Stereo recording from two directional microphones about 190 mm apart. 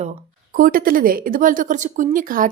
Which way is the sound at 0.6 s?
50° right (ahead or behind).